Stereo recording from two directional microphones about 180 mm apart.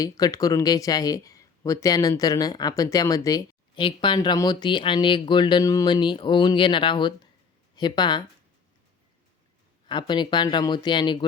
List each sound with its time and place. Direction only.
0.0 s speech: 20° left (ahead or behind)
9.9 s speech: 25° left (ahead or behind)